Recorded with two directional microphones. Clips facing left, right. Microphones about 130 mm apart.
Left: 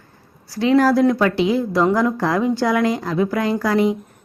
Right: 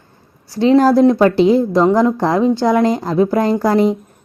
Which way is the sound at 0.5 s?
25° right (ahead or behind).